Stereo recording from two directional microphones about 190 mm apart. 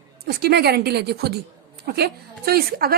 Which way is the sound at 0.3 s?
55° right (ahead or behind).